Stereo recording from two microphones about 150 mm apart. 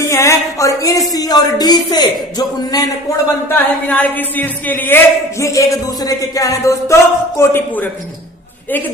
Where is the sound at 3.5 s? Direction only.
10° left (ahead or behind).